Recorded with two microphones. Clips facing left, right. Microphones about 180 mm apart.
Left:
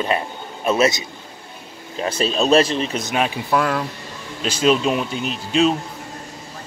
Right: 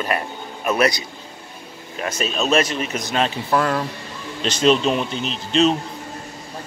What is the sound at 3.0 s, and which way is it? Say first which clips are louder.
A man's voice: even; 10° left (ahead or behind).